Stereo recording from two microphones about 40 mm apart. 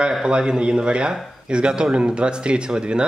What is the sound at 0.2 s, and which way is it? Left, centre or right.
Speech, centre.